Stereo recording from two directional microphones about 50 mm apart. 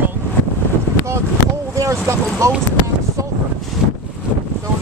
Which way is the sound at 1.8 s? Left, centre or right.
Right.